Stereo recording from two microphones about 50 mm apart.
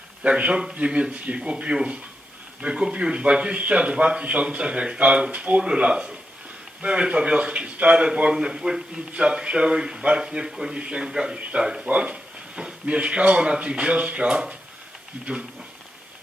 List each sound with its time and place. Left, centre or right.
0.2 s a man's voice: right
11.9 s speech: right